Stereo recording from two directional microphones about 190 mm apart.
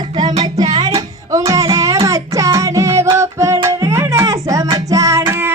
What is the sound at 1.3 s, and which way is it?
Music, 15° right (ahead or behind).